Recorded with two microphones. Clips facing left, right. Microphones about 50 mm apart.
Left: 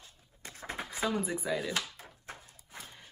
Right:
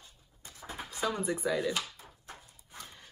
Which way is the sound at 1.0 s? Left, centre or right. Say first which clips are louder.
Right 1 dB; centre.